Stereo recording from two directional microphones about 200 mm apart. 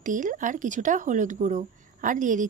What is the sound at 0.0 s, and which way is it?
Speech, 40° right (ahead or behind).